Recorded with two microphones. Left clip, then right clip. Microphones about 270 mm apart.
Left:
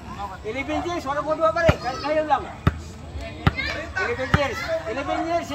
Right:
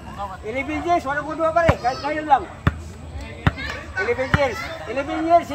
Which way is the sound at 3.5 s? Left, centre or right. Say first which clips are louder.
Even; centre.